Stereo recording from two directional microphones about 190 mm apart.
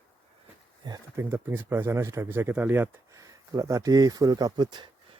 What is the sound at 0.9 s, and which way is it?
Speech, 15° right (ahead or behind).